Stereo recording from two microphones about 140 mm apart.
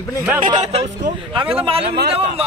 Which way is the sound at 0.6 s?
50° right (ahead or behind).